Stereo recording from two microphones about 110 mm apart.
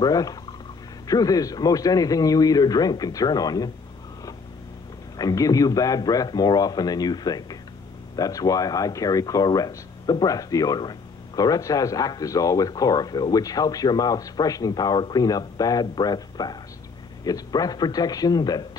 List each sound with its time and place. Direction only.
0.0 s speech: 35° left (ahead or behind)
5.1 s speech: 35° left (ahead or behind)